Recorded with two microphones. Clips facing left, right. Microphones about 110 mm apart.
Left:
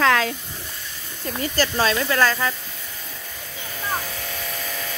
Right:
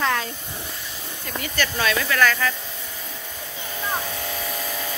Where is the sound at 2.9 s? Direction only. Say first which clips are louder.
Right 2 dB; centre (ahead or behind).